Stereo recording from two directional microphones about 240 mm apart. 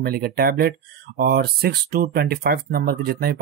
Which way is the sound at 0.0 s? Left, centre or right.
Right.